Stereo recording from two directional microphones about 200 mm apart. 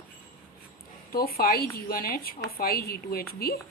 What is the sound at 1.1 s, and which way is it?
A woman's voice, 50° left (ahead or behind).